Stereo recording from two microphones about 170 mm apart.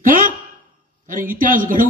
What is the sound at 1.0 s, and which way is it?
Speech, 55° right (ahead or behind).